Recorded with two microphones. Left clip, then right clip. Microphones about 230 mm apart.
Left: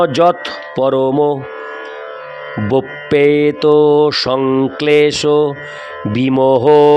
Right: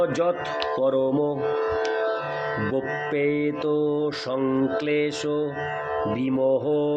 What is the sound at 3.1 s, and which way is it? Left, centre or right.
Mantra, left.